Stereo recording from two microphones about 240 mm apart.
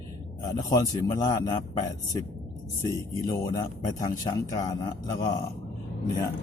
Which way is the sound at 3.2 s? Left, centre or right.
Centre.